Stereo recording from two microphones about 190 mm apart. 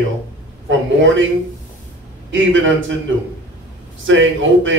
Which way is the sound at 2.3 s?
85° right.